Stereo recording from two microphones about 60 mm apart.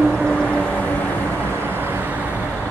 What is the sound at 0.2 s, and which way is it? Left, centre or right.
Vehicle, centre.